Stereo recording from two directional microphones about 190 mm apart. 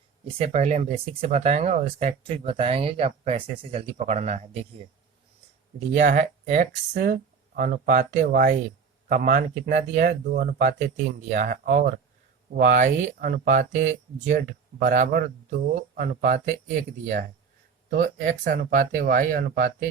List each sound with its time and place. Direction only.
0.3 s speech: 35° right (ahead or behind)
5.9 s speech: 45° right (ahead or behind)
17.9 s speech: 45° right (ahead or behind)